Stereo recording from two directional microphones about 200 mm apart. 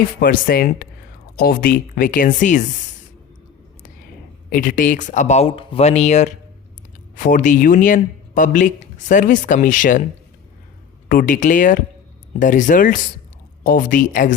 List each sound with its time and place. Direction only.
0.2 s speech: 50° left (ahead or behind)
4.4 s speech: 45° left (ahead or behind)
11.1 s speech: 45° left (ahead or behind)